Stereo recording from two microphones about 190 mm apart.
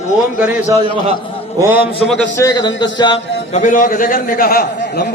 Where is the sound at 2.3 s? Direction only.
20° left (ahead or behind).